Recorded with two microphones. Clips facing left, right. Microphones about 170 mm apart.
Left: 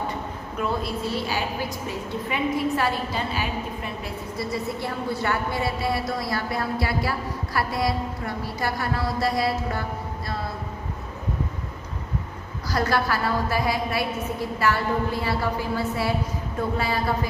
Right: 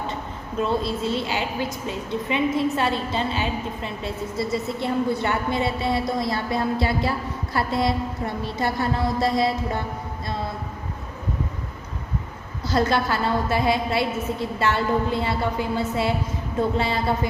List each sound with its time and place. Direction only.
0.6 s a woman's voice: 25° right (ahead or behind)
12.6 s a woman's voice: 25° right (ahead or behind)